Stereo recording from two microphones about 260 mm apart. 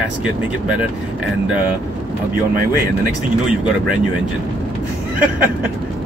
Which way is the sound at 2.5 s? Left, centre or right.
Right.